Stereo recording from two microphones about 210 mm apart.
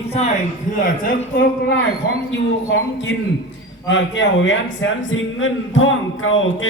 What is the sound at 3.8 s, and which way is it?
A man's voice, 60° left (ahead or behind).